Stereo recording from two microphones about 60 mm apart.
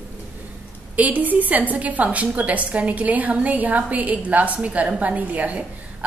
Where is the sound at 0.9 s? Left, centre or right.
Right.